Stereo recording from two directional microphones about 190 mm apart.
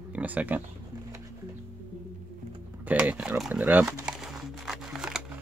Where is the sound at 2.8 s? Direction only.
10° right (ahead or behind).